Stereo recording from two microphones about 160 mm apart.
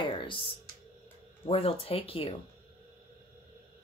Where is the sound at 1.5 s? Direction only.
35° left (ahead or behind).